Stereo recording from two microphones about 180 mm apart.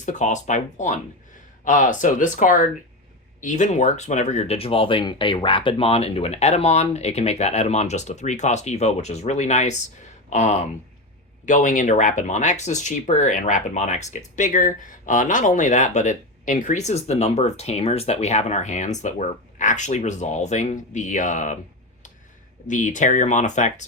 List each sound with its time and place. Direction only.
0.0 s speech: 45° left (ahead or behind)
22.6 s speech: 45° left (ahead or behind)